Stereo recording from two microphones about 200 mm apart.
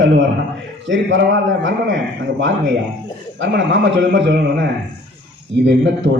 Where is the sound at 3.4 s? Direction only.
60° right (ahead or behind).